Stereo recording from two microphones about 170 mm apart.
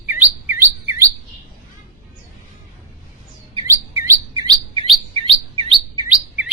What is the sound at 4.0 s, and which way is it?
Chirp, 20° right (ahead or behind).